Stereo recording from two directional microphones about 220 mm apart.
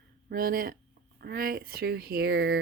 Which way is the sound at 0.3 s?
40° right (ahead or behind).